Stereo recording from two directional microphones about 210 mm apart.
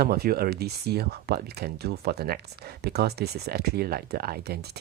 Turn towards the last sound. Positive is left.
turn(degrees=-50)  # may be behind; listen again after turning